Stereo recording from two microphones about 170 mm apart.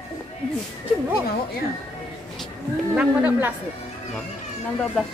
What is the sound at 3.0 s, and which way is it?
Speech, 10° right (ahead or behind).